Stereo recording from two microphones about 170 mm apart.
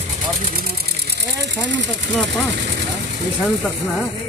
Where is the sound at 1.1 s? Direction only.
75° right (ahead or behind).